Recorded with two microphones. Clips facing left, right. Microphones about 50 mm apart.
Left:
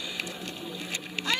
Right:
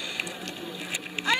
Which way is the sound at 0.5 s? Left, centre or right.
Centre.